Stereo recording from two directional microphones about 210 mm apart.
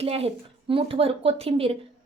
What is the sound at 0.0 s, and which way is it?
A woman's voice, 30° right (ahead or behind).